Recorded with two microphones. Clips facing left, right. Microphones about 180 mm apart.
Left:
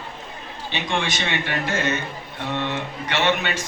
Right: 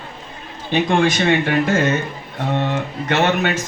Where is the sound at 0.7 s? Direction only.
50° right (ahead or behind).